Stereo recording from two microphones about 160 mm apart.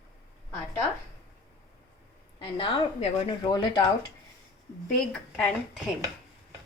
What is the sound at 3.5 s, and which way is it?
Speech, 25° left (ahead or behind).